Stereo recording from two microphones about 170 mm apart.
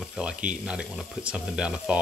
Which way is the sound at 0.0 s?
Centre (ahead or behind).